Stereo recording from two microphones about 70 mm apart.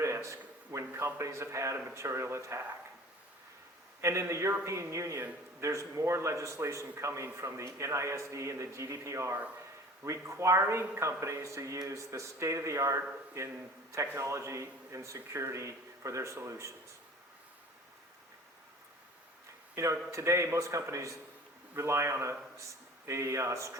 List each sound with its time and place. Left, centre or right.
0.0 s a man's voice: right
4.0 s a man's voice: right
19.7 s a man's voice: right